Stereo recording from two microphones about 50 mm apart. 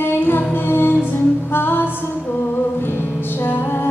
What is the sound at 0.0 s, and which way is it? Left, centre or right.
Music, left.